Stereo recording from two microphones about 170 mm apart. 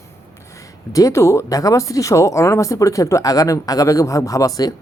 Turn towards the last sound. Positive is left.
turn(degrees=20)  # may be behind; listen again after turning